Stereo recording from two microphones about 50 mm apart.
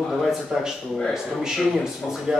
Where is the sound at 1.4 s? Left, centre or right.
Centre.